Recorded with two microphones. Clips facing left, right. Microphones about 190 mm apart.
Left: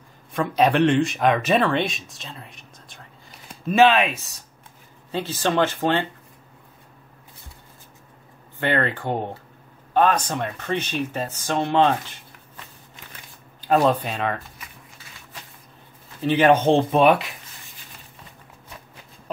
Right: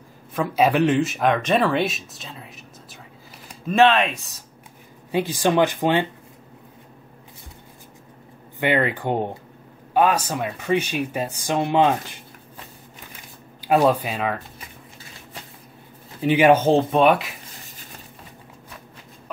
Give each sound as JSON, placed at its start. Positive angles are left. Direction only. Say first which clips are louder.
{"t": 0.3, "sound": "speech", "louder": "even", "side_deg": -5}
{"t": 5.1, "sound": "speech", "louder": "right 3 dB", "side_deg": -15}
{"t": 8.5, "sound": "speech", "louder": "right 2 dB", "side_deg": -15}
{"t": 13.6, "sound": "speech", "louder": "right 1 dB", "side_deg": -10}
{"t": 16.2, "sound": "speech", "louder": "right 1 dB", "side_deg": -10}